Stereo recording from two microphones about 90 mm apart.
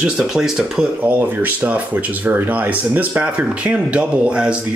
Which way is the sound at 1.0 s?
20° right (ahead or behind).